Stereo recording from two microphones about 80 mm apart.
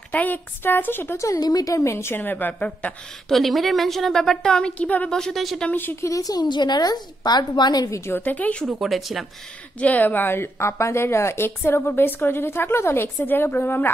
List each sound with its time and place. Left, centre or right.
0.1 s a woman's voice: left
1.1 s a woman's voice: left
1.4 s a woman's voice: left; by 2.9 s centre
3.3 s a woman's voice: centre
5.1 s a woman's voice: centre
5.7 s a woman's voice: left
5.9 s a woman's voice: left
7.9 s a woman's voice: left
8.6 s a woman's voice: centre
9.8 s a woman's voice: centre